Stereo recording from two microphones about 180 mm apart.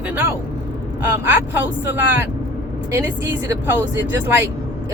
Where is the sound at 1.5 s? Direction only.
10° right (ahead or behind).